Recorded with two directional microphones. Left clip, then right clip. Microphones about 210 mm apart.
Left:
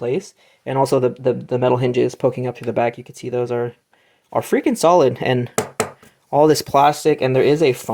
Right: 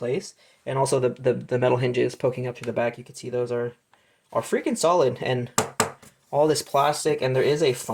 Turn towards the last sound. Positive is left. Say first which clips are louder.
# left 6 dB
turn(degrees=50)  # may be behind; listen again after turning